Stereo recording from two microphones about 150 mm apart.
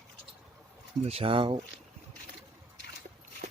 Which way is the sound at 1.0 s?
40° right (ahead or behind).